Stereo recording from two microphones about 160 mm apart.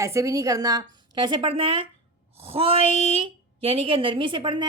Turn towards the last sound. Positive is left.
turn(degrees=-30)  # may be behind; listen again after turning